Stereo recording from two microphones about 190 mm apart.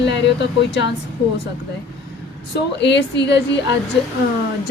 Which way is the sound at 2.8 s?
65° left (ahead or behind).